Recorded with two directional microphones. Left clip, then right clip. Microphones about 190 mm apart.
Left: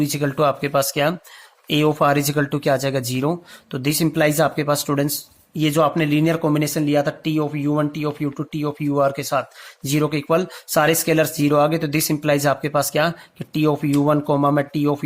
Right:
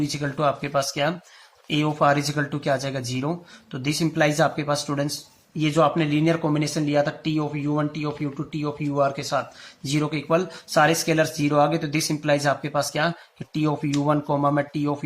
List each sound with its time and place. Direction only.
0.0 s speech: 50° left (ahead or behind)